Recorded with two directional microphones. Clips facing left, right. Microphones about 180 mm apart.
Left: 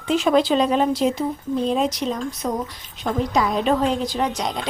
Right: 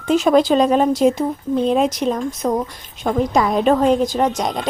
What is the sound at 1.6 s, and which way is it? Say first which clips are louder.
Speech: right 4 dB; 60° right (ahead or behind).